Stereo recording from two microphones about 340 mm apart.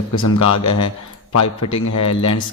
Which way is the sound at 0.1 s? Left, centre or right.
Left.